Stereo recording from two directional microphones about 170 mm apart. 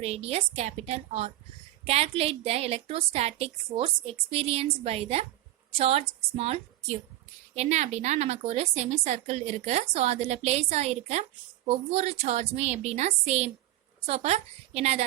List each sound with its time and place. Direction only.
0.0 s a woman's voice: 40° right (ahead or behind)